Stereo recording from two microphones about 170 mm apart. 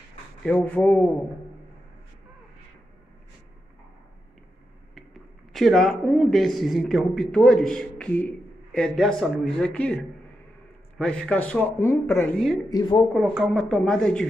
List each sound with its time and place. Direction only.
0.4 s a man's voice: 10° left (ahead or behind)
5.5 s a man's voice: centre (ahead or behind)
12.6 s speech: 25° left (ahead or behind)
13.0 s a man's voice: 5° right (ahead or behind)